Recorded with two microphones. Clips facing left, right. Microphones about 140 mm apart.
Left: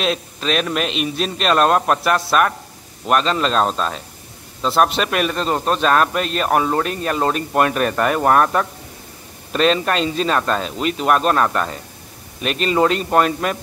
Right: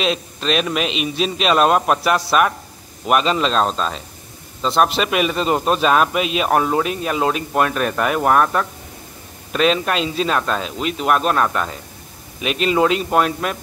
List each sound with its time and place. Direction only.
0.0 s a man's voice: centre (ahead or behind)